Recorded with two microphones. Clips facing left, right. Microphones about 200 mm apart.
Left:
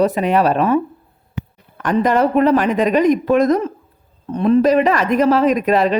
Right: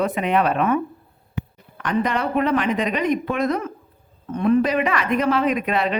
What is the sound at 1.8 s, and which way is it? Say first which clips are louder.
Speech: left 7 dB; 45° left (ahead or behind).